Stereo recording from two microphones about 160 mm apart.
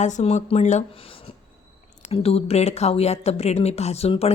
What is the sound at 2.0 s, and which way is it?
A woman's voice, 40° left (ahead or behind).